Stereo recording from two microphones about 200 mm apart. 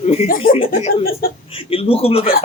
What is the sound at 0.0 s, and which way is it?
Speech, 30° left (ahead or behind).